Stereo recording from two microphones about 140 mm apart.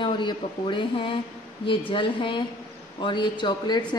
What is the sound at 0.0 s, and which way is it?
Speech, 35° left (ahead or behind).